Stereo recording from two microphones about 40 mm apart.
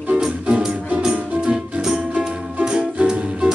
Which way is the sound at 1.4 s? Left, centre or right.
Centre.